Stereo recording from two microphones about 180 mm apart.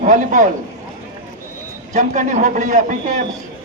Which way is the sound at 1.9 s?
45° right (ahead or behind).